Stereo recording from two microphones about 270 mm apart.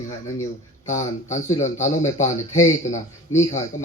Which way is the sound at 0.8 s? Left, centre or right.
Left.